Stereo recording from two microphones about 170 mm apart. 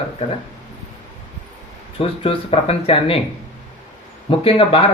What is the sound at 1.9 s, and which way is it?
Speech, 35° left (ahead or behind).